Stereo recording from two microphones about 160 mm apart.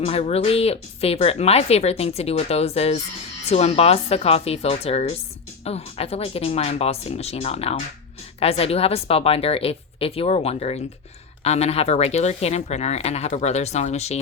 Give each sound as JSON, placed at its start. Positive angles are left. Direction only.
{"t": 0.0, "sound": "speech", "side_deg": 40}